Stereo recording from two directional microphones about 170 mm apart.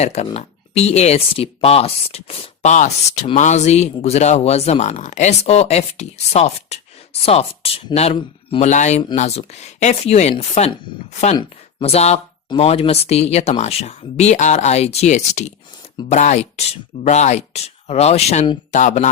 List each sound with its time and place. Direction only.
0.0 s speech: 40° left (ahead or behind)